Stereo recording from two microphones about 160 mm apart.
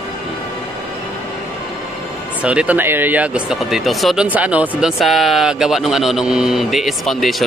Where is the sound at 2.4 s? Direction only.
10° right (ahead or behind).